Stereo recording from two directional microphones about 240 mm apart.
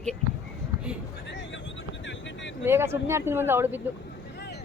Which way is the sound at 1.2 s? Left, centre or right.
Left.